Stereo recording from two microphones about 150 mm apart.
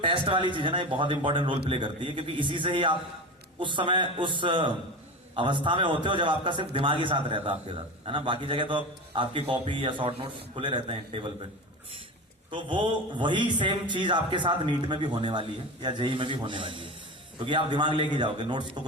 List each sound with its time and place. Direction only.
0.0 s a man's voice: 35° right (ahead or behind)
12.5 s a man's voice: 35° right (ahead or behind)